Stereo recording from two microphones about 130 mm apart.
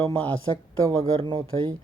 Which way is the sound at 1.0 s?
40° right (ahead or behind).